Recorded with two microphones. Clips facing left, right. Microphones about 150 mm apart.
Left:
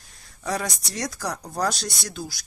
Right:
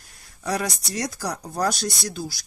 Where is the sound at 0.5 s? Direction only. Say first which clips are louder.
Right 2 dB; centre (ahead or behind).